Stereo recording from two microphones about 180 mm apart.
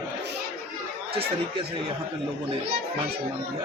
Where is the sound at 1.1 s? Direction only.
30° right (ahead or behind).